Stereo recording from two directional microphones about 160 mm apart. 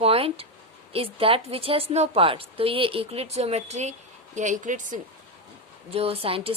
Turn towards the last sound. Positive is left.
turn(degrees=-35)  # may be behind; listen again after turning